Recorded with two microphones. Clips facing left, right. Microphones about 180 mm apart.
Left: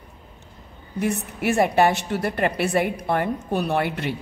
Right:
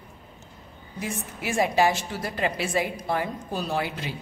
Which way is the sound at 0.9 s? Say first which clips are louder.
Left 8 dB; 65° left (ahead or behind).